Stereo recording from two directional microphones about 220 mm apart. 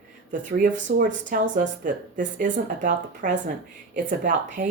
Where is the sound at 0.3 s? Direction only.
35° right (ahead or behind).